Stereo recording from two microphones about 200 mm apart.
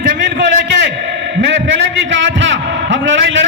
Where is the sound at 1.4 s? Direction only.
65° right (ahead or behind).